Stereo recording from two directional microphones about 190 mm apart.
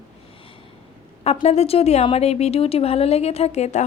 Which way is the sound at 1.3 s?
35° left (ahead or behind).